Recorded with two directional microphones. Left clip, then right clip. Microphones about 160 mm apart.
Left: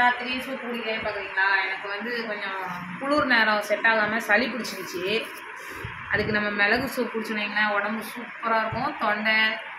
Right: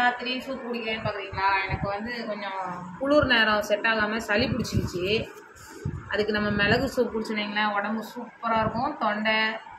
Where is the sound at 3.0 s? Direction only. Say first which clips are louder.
Even; 20° right (ahead or behind).